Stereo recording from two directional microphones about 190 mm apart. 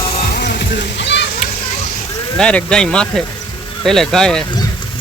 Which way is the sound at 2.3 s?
5° left (ahead or behind).